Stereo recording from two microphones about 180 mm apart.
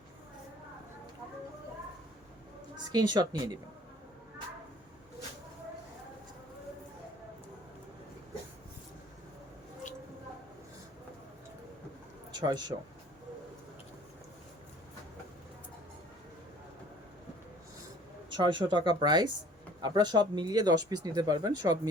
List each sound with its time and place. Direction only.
2.9 s speech: 25° right (ahead or behind)
12.3 s speech: 25° right (ahead or behind)
18.3 s speech: 25° right (ahead or behind)